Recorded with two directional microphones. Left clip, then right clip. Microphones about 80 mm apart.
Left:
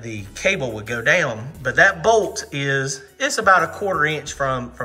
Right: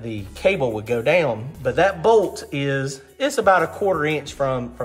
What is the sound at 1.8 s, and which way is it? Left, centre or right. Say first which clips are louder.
Speech: left 2 dB; right.